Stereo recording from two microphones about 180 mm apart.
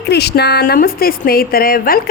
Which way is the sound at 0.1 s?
65° left (ahead or behind).